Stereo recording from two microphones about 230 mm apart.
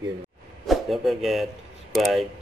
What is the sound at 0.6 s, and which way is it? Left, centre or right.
Speech, centre.